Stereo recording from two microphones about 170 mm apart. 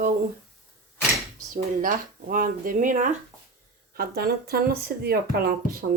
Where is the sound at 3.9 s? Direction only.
65° right (ahead or behind).